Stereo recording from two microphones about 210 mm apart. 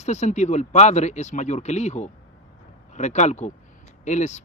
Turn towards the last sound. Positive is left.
turn(degrees=35)  # may be behind; listen again after turning